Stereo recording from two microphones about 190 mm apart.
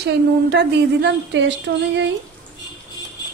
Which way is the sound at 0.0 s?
65° right (ahead or behind).